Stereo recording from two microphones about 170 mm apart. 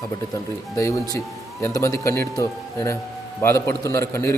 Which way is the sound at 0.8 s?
15° left (ahead or behind).